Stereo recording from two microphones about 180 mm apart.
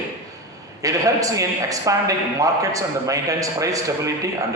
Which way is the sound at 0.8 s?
20° right (ahead or behind).